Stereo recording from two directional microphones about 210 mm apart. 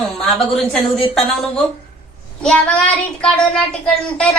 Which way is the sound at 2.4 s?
5° left (ahead or behind).